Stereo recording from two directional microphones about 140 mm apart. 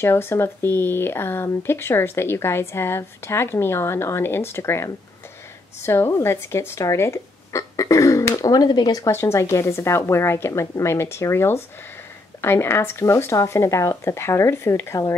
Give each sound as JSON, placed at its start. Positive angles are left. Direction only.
{"t": 0.0, "sound": "speech", "side_deg": 20}
{"t": 9.1, "sound": "speech", "side_deg": 20}